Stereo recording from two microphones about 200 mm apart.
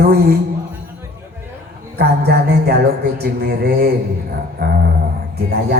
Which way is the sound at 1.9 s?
50° right (ahead or behind).